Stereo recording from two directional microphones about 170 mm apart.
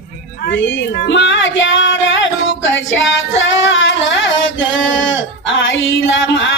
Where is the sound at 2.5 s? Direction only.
90° left.